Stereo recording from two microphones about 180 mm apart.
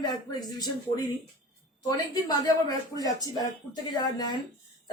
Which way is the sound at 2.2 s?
20° left (ahead or behind).